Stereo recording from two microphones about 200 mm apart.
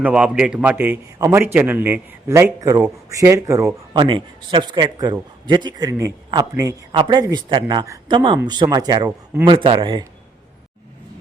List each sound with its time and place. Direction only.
0.0 s a man's voice: 5° right (ahead or behind)
9.5 s a man's voice: 25° right (ahead or behind)